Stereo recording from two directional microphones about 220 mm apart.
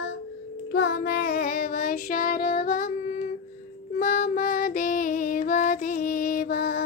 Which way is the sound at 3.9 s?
40° left (ahead or behind).